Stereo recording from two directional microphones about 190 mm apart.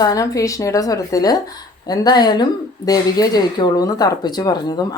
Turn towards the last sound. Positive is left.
turn(degrees=20)  # may be behind; listen again after turning